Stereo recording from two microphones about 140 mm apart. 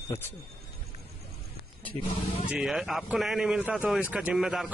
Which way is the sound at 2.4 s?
5° right (ahead or behind).